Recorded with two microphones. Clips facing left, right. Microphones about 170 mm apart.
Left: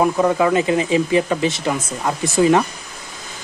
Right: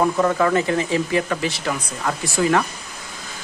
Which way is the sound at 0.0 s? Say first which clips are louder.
Left 2 dB; 15° left (ahead or behind).